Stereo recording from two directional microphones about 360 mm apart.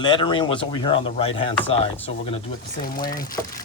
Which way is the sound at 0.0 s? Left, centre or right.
Centre.